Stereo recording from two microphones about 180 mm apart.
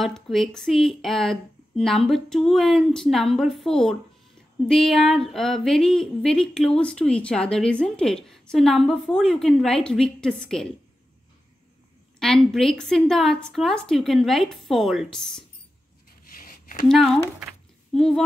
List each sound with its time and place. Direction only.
0.0 s speech: centre (ahead or behind)
12.2 s speech: 5° left (ahead or behind)
16.3 s a sound: 50° left (ahead or behind)
16.8 s speech: centre (ahead or behind)